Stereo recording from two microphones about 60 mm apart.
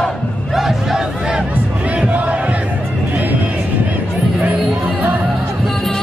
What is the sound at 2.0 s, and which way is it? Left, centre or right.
Battle cry, right.